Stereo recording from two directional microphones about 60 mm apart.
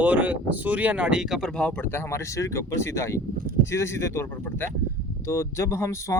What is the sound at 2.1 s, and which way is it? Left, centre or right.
Speech, left.